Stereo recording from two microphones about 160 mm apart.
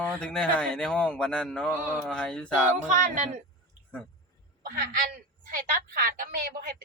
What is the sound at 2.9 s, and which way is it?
Speech, 50° right (ahead or behind).